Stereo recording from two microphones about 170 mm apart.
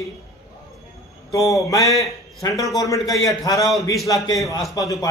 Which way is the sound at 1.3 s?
20° left (ahead or behind).